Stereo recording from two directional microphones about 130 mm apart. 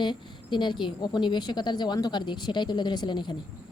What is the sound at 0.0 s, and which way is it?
A woman's voice, 35° left (ahead or behind).